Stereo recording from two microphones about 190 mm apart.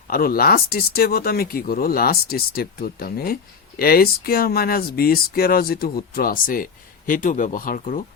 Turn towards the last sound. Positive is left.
turn(degrees=45)  # may be behind; listen again after turning